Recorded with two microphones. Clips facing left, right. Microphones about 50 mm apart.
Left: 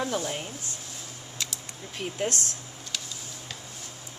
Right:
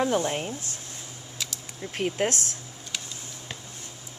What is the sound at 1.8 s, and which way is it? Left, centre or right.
Speech, right.